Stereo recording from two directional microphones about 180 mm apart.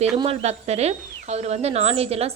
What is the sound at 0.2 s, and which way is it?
Speech, 35° right (ahead or behind).